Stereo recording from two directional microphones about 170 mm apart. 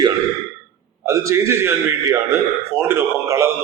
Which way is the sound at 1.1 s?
20° right (ahead or behind).